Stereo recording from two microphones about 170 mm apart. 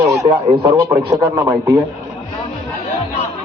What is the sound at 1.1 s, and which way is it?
Speech, 15° right (ahead or behind).